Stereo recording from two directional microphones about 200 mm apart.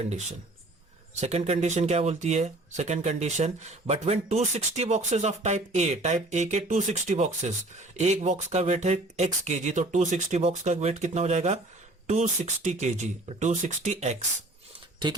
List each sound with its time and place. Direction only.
0.0 s speech: 35° right (ahead or behind)